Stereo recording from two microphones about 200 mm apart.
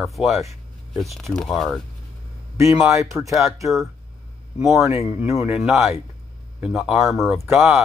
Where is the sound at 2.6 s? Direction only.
15° right (ahead or behind).